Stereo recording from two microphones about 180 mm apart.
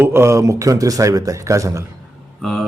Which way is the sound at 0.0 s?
15° right (ahead or behind).